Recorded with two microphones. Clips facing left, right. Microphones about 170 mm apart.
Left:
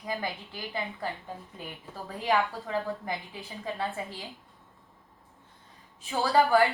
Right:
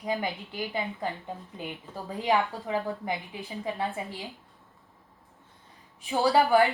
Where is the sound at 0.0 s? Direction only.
20° right (ahead or behind).